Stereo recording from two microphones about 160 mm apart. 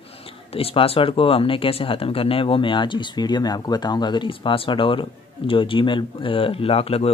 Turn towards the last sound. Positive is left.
turn(degrees=40)  # may be behind; listen again after turning